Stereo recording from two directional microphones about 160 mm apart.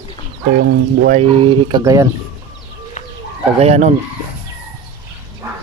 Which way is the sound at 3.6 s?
45° right (ahead or behind).